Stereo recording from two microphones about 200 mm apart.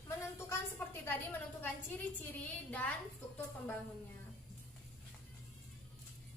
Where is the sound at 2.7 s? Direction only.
5° left (ahead or behind).